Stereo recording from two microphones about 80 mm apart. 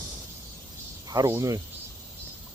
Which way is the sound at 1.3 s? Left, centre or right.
Right.